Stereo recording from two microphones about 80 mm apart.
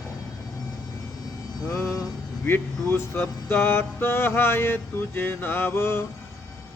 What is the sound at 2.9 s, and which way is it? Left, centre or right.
Mantra, left.